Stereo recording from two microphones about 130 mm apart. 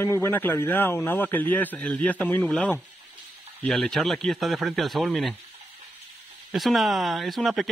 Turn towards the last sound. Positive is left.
turn(degrees=0)  # may be behind; listen again after turning